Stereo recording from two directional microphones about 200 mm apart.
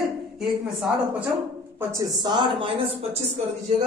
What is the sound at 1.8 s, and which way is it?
Speech, 15° right (ahead or behind).